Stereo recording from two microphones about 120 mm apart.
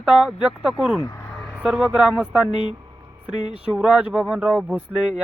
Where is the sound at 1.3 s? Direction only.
5° left (ahead or behind).